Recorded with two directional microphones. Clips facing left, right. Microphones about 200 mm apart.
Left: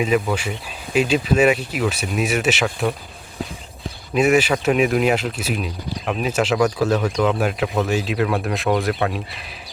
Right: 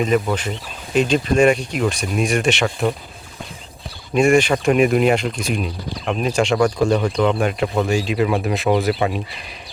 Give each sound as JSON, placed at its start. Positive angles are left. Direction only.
{"t": 0.0, "sound": "speech", "side_deg": 5}
{"t": 4.1, "sound": "speech", "side_deg": 5}